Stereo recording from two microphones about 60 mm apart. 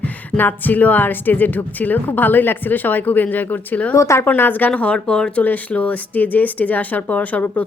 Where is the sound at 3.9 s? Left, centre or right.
Left.